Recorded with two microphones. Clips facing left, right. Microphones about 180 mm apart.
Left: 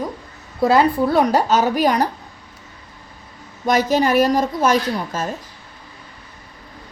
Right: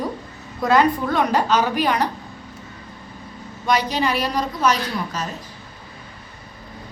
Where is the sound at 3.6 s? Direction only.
45° left (ahead or behind).